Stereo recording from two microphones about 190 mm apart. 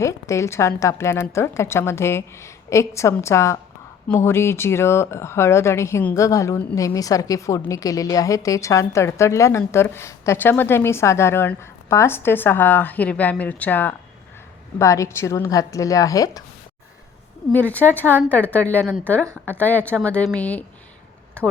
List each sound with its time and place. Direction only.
0.0 s speech: 15° left (ahead or behind)
17.5 s speech: 10° left (ahead or behind)